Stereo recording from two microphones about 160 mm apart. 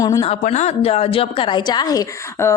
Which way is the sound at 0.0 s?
20° left (ahead or behind).